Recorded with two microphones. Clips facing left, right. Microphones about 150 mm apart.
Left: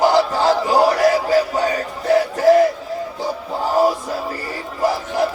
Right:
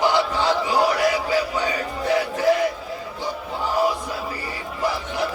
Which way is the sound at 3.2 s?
40° left (ahead or behind).